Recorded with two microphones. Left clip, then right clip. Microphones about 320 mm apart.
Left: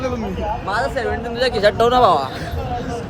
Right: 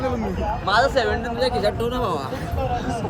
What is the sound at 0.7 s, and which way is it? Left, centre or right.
Speech, centre.